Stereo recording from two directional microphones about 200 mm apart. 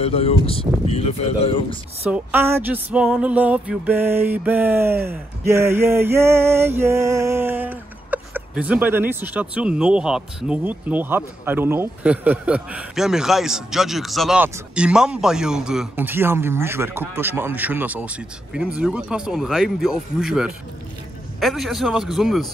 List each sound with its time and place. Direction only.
0.0 s speech: 30° left (ahead or behind)
2.0 s a sound: 10° right (ahead or behind)
17.1 s speech: 10° right (ahead or behind)